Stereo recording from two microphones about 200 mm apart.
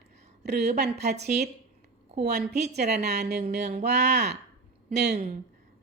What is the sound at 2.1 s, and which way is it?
Speech, 55° right (ahead or behind).